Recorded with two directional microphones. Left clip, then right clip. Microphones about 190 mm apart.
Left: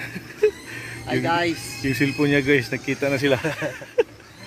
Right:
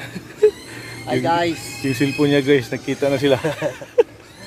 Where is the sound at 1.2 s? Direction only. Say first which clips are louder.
Right 3 dB; 10° right (ahead or behind).